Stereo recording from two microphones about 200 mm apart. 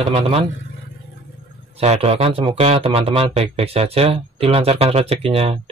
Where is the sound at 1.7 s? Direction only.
30° right (ahead or behind).